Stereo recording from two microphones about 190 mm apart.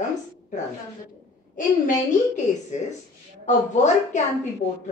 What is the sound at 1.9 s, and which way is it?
A woman's voice, 40° left (ahead or behind).